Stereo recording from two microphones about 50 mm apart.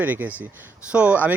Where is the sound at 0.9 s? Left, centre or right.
Right.